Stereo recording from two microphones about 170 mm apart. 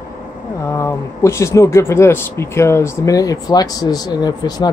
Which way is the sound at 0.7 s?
15° left (ahead or behind).